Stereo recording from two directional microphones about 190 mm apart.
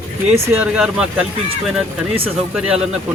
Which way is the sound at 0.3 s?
10° right (ahead or behind).